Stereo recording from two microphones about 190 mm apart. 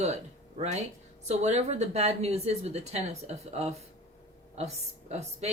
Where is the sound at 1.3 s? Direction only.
35° right (ahead or behind).